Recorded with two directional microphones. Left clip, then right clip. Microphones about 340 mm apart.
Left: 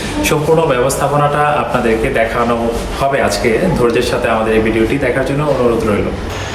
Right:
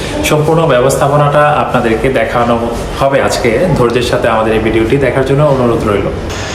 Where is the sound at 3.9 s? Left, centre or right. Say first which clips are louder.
Right 3 dB; centre.